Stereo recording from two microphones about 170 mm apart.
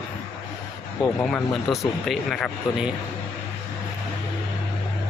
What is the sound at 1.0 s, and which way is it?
Speech, 5° left (ahead or behind).